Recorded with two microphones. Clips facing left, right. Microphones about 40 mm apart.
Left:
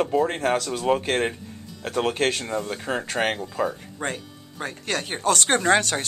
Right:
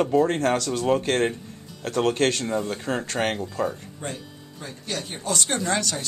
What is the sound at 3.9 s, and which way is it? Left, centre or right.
Speech, left.